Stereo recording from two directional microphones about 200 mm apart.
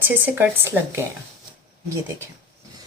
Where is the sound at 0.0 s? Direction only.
10° right (ahead or behind).